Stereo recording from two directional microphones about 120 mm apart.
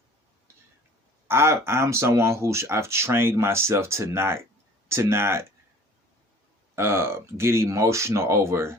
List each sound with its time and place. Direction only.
1.3 s speech: 20° right (ahead or behind)
6.7 s speech: 20° right (ahead or behind)